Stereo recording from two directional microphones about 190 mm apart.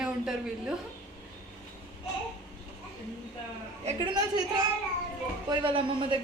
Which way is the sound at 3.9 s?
20° right (ahead or behind).